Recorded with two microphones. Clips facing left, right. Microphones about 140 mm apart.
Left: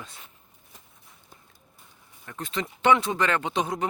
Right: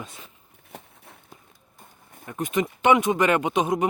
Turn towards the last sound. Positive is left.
turn(degrees=-20)  # may be behind; listen again after turning